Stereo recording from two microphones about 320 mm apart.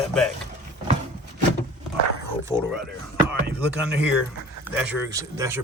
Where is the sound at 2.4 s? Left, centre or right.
Centre.